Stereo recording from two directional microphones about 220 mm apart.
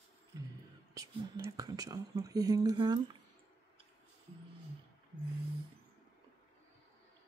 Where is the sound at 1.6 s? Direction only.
15° right (ahead or behind).